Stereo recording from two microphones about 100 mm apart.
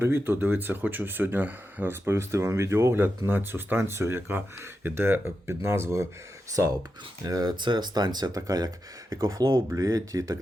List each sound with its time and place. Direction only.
0.0 s speech: 20° right (ahead or behind)